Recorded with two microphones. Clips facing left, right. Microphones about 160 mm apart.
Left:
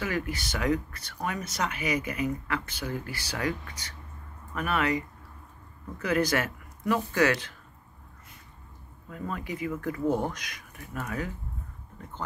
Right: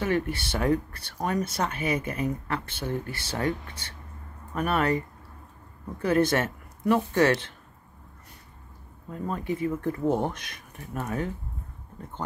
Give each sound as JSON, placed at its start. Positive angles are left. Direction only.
{"t": 0.0, "sound": "speech", "side_deg": -30}
{"t": 9.1, "sound": "speech", "side_deg": -30}